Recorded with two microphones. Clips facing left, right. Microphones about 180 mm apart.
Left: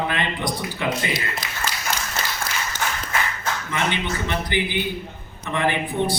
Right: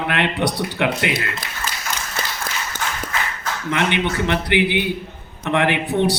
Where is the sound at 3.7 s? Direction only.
65° right (ahead or behind).